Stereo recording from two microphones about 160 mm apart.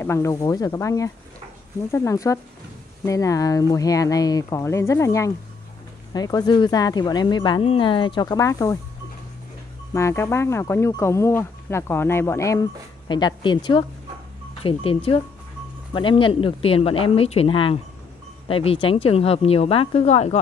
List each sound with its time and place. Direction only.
0.0 s speech: 15° left (ahead or behind)
9.9 s speech: 15° left (ahead or behind)
13.1 s speech: 30° left (ahead or behind)